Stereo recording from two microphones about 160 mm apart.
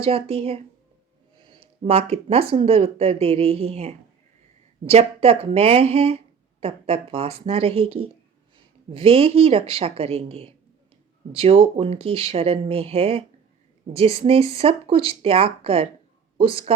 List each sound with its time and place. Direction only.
0.0 s speech: 40° right (ahead or behind)